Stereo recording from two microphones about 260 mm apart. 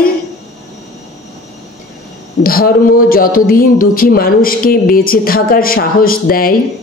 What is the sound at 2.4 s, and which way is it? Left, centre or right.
A man's voice, left.